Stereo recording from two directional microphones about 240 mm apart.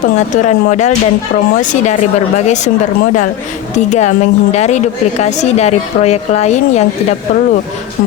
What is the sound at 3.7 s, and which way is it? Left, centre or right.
A woman's voice, left.